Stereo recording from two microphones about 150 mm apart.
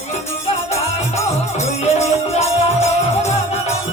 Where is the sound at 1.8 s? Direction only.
45° left (ahead or behind).